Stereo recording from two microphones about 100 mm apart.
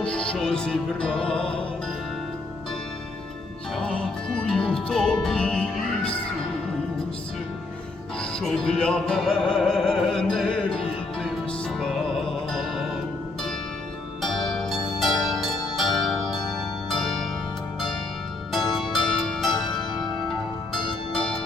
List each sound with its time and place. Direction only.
0.0 s music: 10° left (ahead or behind)
3.8 s music: 10° left (ahead or behind)
8.2 s music: 5° left (ahead or behind)
14.2 s pizzicato: centre (ahead or behind)
15.2 s music: centre (ahead or behind)
16.9 s harp: 5° left (ahead or behind)
18.5 s music: centre (ahead or behind)
19.6 s music: 45° left (ahead or behind)